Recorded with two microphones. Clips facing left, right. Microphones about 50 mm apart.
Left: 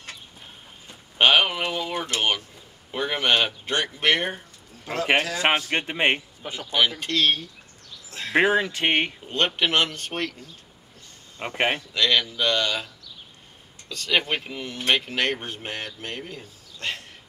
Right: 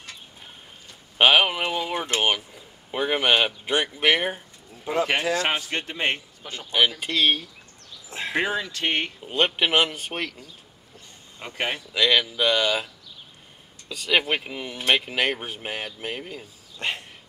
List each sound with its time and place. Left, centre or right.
1.1 s speech: centre
5.7 s speech: left
7.0 s speech: centre
8.1 s a sound: right
8.4 s speech: left
9.2 s speech: centre
11.3 s speech: left
11.9 s speech: centre
16.7 s a sound: right